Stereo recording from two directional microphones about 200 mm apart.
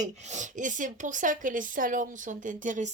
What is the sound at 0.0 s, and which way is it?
Speech, 35° right (ahead or behind).